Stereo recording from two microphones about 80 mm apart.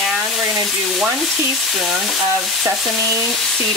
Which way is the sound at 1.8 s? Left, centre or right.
Centre.